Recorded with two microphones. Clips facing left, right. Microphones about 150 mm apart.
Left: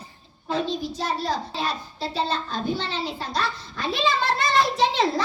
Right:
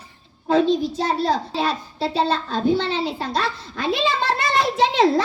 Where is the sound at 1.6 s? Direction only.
65° right (ahead or behind).